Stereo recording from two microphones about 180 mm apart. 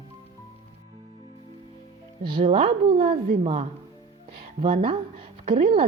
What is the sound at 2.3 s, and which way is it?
A woman's voice, 30° right (ahead or behind).